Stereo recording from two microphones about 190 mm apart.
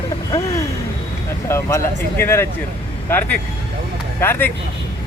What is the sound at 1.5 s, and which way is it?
Speech, 15° left (ahead or behind).